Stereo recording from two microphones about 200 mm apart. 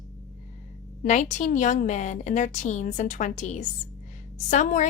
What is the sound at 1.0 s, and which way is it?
A woman's voice, 35° left (ahead or behind).